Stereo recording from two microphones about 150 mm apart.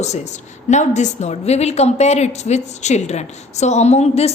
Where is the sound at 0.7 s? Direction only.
50° left (ahead or behind).